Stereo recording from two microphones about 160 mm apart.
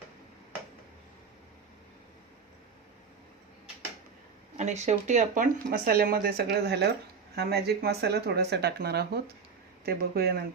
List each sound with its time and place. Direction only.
4.5 s speech: 45° right (ahead or behind); by 9.2 s 90° right
9.8 s speech: 70° right (ahead or behind)